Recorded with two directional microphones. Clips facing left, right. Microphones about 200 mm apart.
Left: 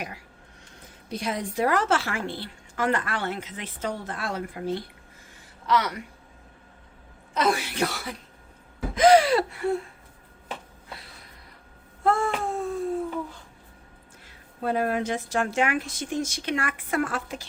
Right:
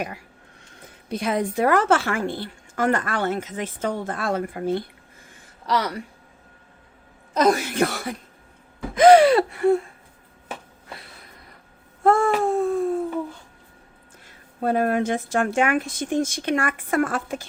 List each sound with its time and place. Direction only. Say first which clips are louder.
1.1 s a woman's voice: right 5 dB; 55° right (ahead or behind)
5.6 s speech: right 1 dB; 35° right (ahead or behind)
7.3 s a woman's voice: right 5 dB; 40° right (ahead or behind)
9.0 s gasp: right 5 dB; 55° right (ahead or behind)
12.0 s a sound: right 6 dB; 50° right (ahead or behind)
14.6 s a woman's voice: right 4 dB; 45° right (ahead or behind)